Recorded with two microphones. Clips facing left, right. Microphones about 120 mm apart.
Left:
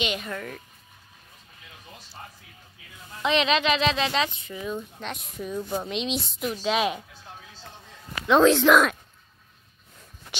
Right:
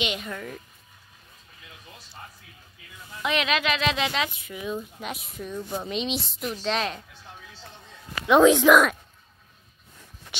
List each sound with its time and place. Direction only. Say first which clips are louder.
0.0 s speech: left 1 dB; 15° right (ahead or behind)
0.3 s a child's voice: left 1 dB; 5° right (ahead or behind)
3.2 s a child's voice: left 3 dB; 5° right (ahead or behind)
8.3 s speech: right 1 dB; 10° right (ahead or behind)